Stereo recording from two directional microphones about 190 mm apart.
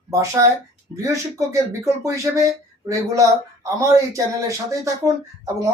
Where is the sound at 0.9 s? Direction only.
15° right (ahead or behind).